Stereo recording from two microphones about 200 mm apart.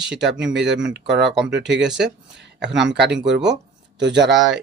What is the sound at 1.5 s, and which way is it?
Speech, 60° right (ahead or behind).